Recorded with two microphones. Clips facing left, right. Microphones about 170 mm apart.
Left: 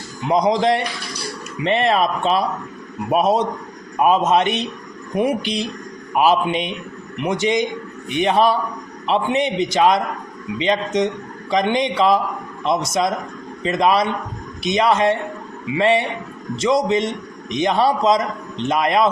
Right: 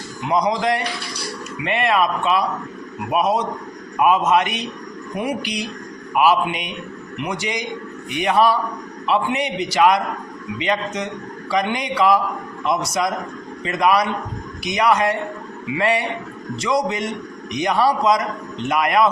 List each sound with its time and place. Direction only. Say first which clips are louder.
0.3 s a man's voice: left 3 dB; 25° left (ahead or behind)